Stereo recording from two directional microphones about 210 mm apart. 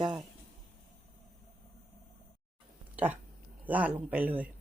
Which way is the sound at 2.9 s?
10° right (ahead or behind).